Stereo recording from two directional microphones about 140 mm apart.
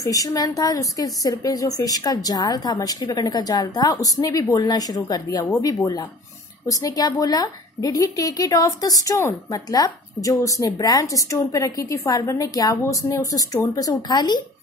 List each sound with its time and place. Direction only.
0.0 s a woman's voice: 25° left (ahead or behind)
6.7 s a woman's voice: 25° left (ahead or behind)